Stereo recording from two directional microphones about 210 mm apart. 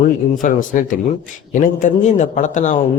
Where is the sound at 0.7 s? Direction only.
40° left (ahead or behind).